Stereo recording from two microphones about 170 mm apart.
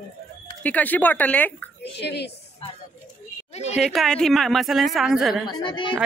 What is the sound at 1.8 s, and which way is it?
Speech, 80° left.